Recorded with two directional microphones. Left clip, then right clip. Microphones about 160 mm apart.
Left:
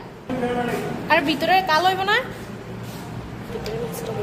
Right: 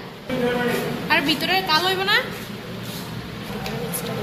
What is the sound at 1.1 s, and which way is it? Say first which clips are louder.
A woman's voice: left 2 dB; 90° left.